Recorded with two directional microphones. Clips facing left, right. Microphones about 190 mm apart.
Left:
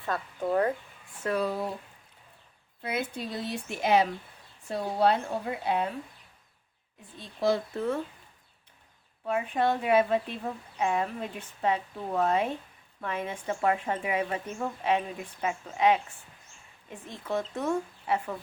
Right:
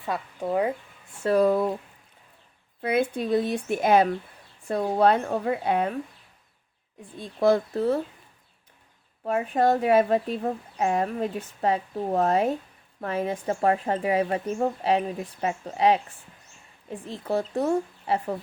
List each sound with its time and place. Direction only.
0.0 s speech: 10° right (ahead or behind)
1.2 s a woman's voice: 40° right (ahead or behind)
1.5 s speech: 55° right (ahead or behind)
2.8 s speech: 55° right (ahead or behind)
7.2 s speech: 50° right (ahead or behind)
7.7 s a woman's voice: 35° right (ahead or behind)
9.2 s a woman's voice: 45° right (ahead or behind)